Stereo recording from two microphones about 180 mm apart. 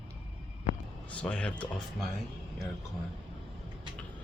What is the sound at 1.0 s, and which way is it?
Speech, 5° left (ahead or behind).